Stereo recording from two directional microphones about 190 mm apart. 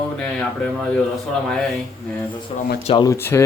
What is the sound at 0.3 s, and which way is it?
Speech, 5° left (ahead or behind).